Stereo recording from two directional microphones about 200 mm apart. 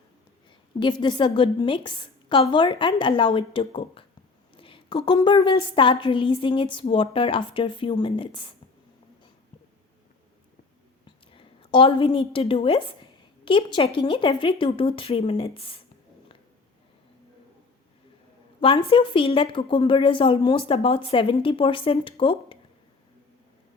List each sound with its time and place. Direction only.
0.8 s a woman's voice: 20° left (ahead or behind)
11.0 s a woman's voice: 25° left (ahead or behind)
18.6 s a woman's voice: 25° left (ahead or behind)